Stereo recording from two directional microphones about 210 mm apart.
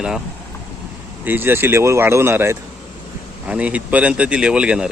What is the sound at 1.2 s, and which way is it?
Speech, 10° right (ahead or behind).